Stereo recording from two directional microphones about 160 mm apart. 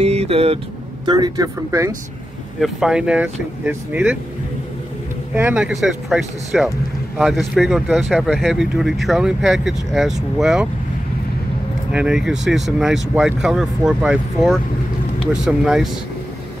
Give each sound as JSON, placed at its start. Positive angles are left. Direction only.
{"t": 0.0, "sound": "vehicle", "side_deg": -40}
{"t": 1.0, "sound": "speech", "side_deg": -25}
{"t": 2.6, "sound": "speech", "side_deg": -5}
{"t": 5.3, "sound": "speech", "side_deg": -10}
{"t": 11.9, "sound": "speech", "side_deg": -5}